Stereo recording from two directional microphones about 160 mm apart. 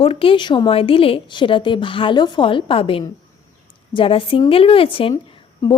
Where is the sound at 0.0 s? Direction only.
35° left (ahead or behind).